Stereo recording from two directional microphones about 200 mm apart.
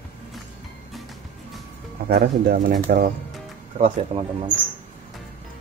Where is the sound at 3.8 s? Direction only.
30° right (ahead or behind).